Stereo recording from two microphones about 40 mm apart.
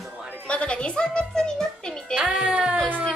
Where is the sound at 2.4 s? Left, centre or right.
Centre.